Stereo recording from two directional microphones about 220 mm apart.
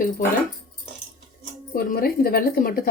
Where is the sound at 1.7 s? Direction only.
40° left (ahead or behind).